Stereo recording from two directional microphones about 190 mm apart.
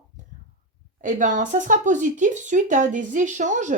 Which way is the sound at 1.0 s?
40° right (ahead or behind).